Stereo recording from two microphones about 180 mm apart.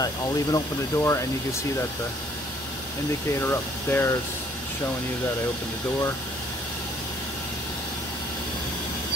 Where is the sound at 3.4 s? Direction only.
15° left (ahead or behind).